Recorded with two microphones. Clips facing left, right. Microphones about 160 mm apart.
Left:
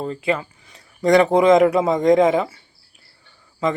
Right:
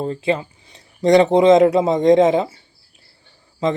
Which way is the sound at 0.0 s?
30° right (ahead or behind).